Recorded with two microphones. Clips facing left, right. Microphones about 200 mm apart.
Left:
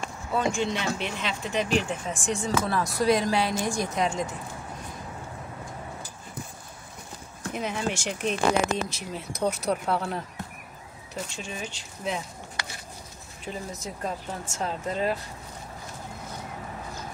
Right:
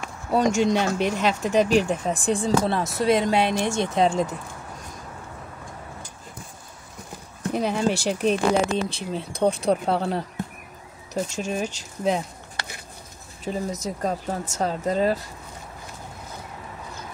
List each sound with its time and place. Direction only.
0.4 s speech: 40° right (ahead or behind)
7.5 s speech: 35° right (ahead or behind)
11.1 s speech: 45° right (ahead or behind)
13.4 s speech: 40° right (ahead or behind)